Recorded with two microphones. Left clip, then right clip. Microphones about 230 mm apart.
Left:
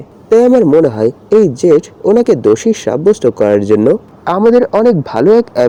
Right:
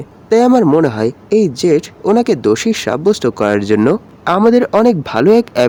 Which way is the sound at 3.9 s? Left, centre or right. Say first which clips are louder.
Left 1 dB; centre.